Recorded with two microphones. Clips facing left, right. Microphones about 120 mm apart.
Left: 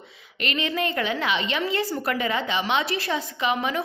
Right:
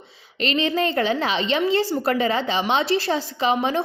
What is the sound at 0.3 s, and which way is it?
A woman's voice, 30° right (ahead or behind).